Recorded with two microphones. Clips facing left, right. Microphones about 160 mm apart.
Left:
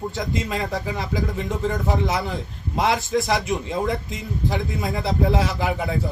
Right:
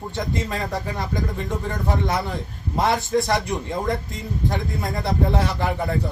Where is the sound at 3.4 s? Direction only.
20° left (ahead or behind).